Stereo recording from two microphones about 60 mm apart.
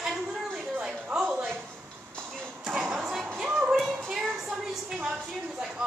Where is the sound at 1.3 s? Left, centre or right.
Right.